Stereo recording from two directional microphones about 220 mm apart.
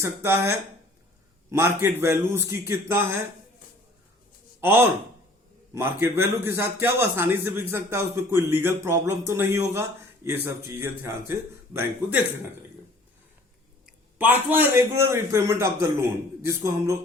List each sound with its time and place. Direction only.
0.0 s speech: 10° right (ahead or behind)
4.6 s speech: 10° right (ahead or behind)
14.2 s speech: 10° right (ahead or behind)